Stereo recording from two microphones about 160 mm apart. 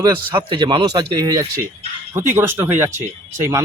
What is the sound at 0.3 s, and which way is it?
Speech, 30° right (ahead or behind).